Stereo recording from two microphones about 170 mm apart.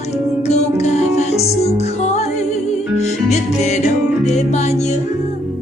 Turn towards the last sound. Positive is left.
turn(degrees=40)  # may be behind; listen again after turning